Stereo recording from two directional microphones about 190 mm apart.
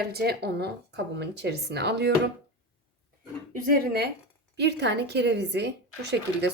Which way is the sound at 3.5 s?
55° right (ahead or behind).